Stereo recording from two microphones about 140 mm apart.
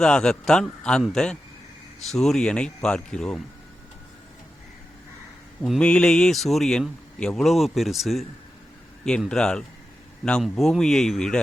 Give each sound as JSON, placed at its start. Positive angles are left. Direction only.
{"t": 0.0, "sound": "speech", "side_deg": 5}
{"t": 5.6, "sound": "speech", "side_deg": 5}